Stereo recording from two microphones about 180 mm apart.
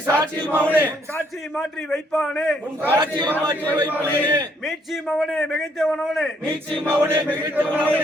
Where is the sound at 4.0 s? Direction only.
10° left (ahead or behind).